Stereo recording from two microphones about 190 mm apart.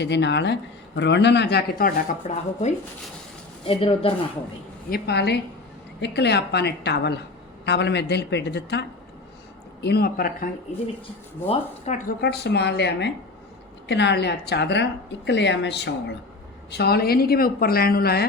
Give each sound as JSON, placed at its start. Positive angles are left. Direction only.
{"t": 0.0, "sound": "a woman's voice", "side_deg": 65}
{"t": 2.2, "sound": "speech", "side_deg": 40}
{"t": 4.9, "sound": "a woman's voice", "side_deg": 60}
{"t": 11.4, "sound": "speech", "side_deg": 40}
{"t": 12.2, "sound": "a woman's voice", "side_deg": 60}